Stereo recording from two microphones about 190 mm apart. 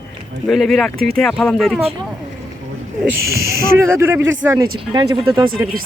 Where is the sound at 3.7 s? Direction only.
10° right (ahead or behind).